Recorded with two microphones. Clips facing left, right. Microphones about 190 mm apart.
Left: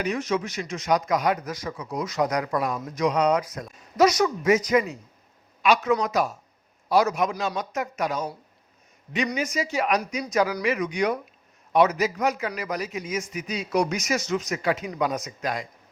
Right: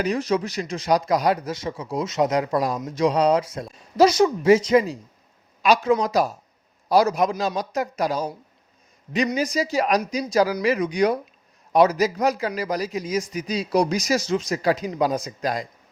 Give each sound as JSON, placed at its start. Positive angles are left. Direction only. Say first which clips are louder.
{"t": 0.0, "sound": "a man's voice", "louder": "right 3 dB", "side_deg": -35}